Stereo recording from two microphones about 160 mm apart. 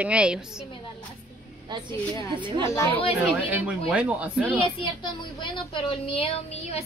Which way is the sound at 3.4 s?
10° right (ahead or behind).